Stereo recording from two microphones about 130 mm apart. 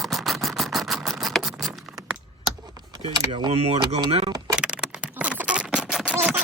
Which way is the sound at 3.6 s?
50° right (ahead or behind).